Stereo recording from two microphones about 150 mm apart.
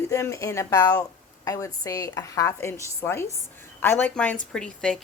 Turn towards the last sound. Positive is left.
turn(degrees=5)  # may be behind; listen again after turning